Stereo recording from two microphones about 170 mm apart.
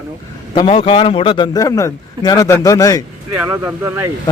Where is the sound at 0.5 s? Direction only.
30° left (ahead or behind).